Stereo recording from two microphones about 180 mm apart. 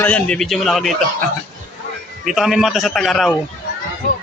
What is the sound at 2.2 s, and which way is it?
Speech, centre (ahead or behind).